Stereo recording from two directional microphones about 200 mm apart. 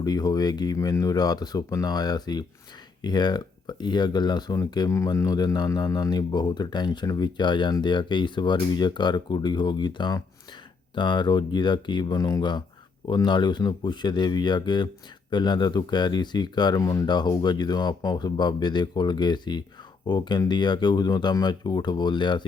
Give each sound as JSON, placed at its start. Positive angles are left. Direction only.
{"t": 0.0, "sound": "speech", "side_deg": 20}